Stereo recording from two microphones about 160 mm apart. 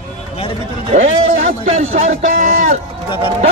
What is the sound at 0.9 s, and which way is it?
A man's voice, 50° right (ahead or behind).